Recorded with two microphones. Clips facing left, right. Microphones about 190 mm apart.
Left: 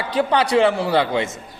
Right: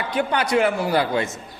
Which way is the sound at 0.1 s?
30° left (ahead or behind).